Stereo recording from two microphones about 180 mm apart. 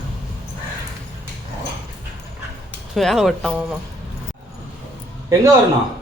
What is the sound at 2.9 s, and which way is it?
Speech, centre (ahead or behind).